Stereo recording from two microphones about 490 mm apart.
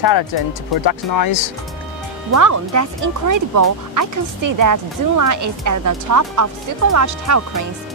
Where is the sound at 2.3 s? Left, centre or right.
Right.